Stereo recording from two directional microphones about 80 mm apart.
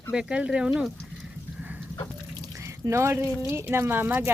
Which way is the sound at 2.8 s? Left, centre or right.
Right.